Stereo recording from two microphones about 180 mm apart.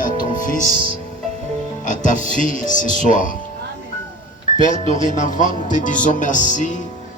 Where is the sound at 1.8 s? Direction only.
45° left (ahead or behind).